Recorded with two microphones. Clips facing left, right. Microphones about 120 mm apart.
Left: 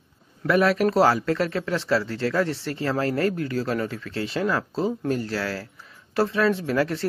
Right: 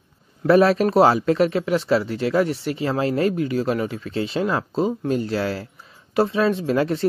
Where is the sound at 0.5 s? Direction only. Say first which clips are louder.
Right 4 dB; 30° right (ahead or behind).